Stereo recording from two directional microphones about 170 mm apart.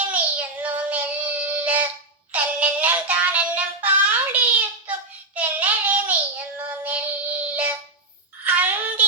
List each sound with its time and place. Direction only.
0.1 s child singing: 10° right (ahead or behind)
2.3 s music: 10° right (ahead or behind)
4.9 s child singing: 10° right (ahead or behind)
8.4 s a sound: 10° right (ahead or behind)